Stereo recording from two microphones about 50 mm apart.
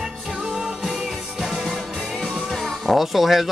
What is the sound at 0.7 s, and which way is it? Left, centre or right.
Music, centre.